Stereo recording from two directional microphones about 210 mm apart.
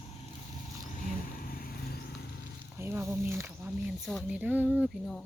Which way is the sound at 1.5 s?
45° left (ahead or behind).